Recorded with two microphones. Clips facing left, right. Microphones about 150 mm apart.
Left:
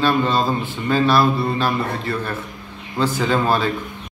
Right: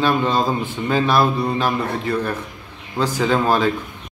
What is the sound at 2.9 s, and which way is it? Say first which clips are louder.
Speech: even; 10° right (ahead or behind).